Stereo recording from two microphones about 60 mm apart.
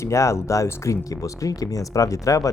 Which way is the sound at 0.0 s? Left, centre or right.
Left.